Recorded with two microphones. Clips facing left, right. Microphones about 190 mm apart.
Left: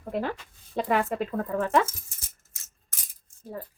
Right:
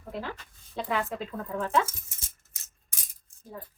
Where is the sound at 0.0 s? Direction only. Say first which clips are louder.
Left 7 dB; 55° left (ahead or behind).